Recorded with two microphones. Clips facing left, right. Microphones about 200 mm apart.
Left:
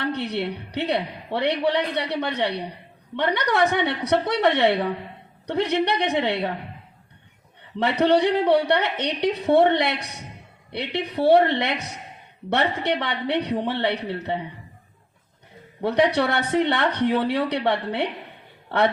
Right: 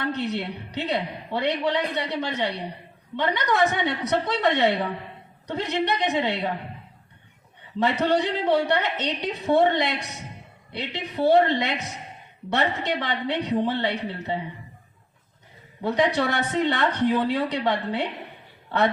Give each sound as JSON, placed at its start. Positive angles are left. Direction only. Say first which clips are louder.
{"t": 0.2, "sound": "speech", "louder": "left 1 dB", "side_deg": 65}
{"t": 7.8, "sound": "speech", "louder": "left 3 dB", "side_deg": 60}
{"t": 15.8, "sound": "speech", "louder": "left 2 dB", "side_deg": 60}